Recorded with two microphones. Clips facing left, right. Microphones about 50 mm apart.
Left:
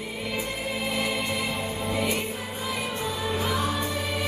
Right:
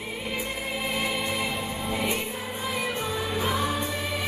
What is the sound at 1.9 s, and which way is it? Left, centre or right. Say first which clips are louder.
Music: left 1 dB; right.